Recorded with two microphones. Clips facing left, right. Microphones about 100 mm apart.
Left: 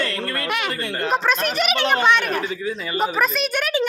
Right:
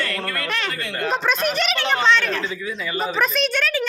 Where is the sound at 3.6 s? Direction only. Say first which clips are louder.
Left 2 dB; 15° left (ahead or behind).